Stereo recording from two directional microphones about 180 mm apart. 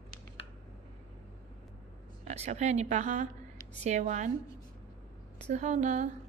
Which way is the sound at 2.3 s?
40° right (ahead or behind).